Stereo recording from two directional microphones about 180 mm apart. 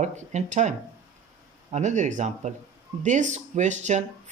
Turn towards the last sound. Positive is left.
turn(degrees=-40)  # may be behind; listen again after turning